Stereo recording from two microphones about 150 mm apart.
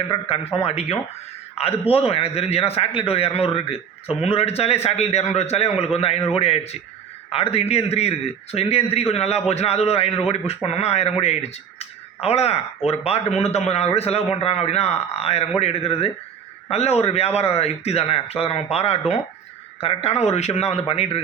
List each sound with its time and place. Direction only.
0.1 s a man's voice: 40° left (ahead or behind)